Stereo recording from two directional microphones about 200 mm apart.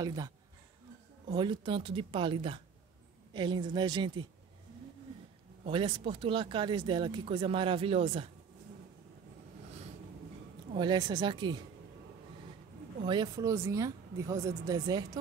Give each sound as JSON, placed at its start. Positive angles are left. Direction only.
{"t": 0.0, "sound": "speech", "side_deg": -20}
{"t": 5.7, "sound": "speech", "side_deg": -25}
{"t": 10.8, "sound": "speech", "side_deg": -20}
{"t": 13.0, "sound": "a woman's voice", "side_deg": -20}